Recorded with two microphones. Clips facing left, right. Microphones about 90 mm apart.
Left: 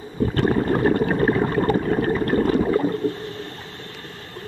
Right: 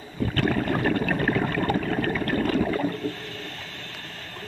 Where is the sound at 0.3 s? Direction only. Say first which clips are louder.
Left 4 dB; 30° left (ahead or behind).